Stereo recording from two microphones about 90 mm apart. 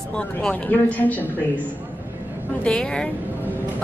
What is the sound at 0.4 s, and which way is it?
Speech, 15° left (ahead or behind).